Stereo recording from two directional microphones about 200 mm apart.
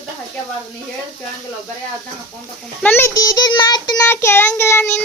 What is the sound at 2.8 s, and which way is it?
Child singing, 10° left (ahead or behind).